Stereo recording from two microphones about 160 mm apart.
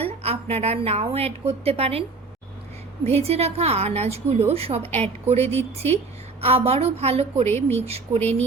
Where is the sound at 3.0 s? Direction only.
40° right (ahead or behind).